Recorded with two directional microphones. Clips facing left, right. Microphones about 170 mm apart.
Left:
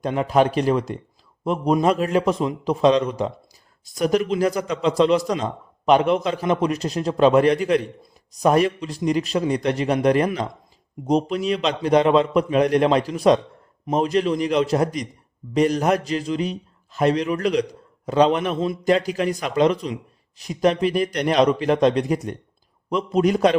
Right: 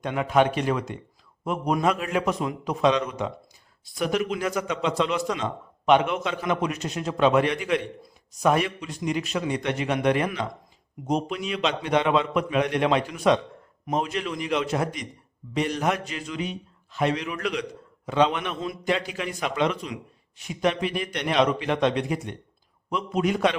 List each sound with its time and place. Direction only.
0.0 s a man's voice: 35° left (ahead or behind)